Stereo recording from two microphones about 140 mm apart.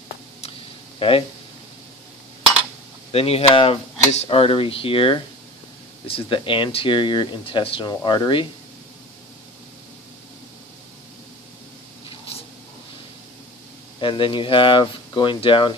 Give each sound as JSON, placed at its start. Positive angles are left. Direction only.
{"t": 0.9, "sound": "speech", "side_deg": 40}
{"t": 3.1, "sound": "speech", "side_deg": 45}
{"t": 13.9, "sound": "speech", "side_deg": 35}